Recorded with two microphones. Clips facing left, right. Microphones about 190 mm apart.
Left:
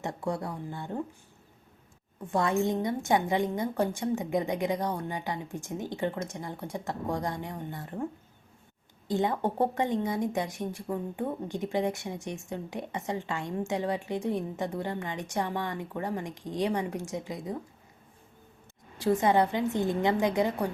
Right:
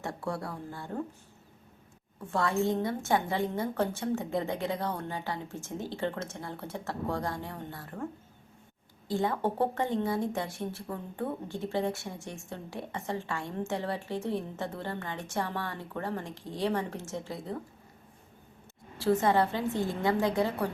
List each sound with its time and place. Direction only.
0.0 s speech: 20° left (ahead or behind)
2.3 s speech: 20° left (ahead or behind)
9.0 s speech: 20° left (ahead or behind)
18.9 s speech: 15° left (ahead or behind)